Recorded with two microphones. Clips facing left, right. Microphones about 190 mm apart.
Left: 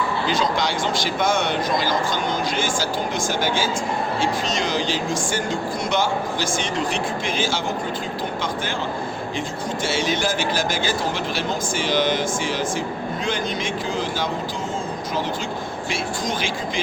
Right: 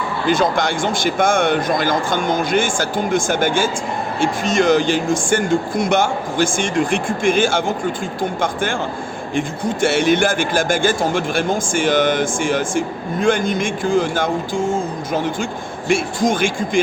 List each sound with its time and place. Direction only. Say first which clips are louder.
0.3 s speech: right 8 dB; 50° right (ahead or behind)
9.8 s speech: right 8 dB; 60° right (ahead or behind)
15.9 s speech: right 10 dB; 50° right (ahead or behind)